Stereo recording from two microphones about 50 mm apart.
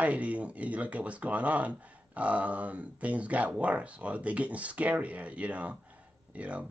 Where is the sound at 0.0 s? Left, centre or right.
Right.